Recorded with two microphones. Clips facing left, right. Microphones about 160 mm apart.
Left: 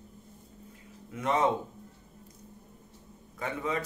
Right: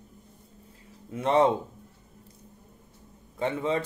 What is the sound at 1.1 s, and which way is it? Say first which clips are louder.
Speech: right 5 dB; 30° right (ahead or behind).